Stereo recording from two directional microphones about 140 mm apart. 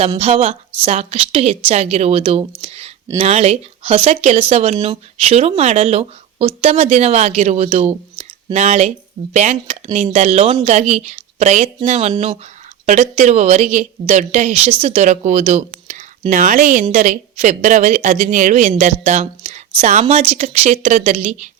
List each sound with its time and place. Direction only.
0.2 s a woman's voice: 45° right (ahead or behind)